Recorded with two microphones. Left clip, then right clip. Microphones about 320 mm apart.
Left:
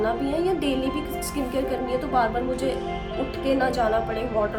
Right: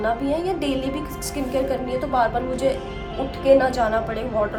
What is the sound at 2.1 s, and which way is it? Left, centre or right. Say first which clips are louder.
Speech: right 3 dB; centre.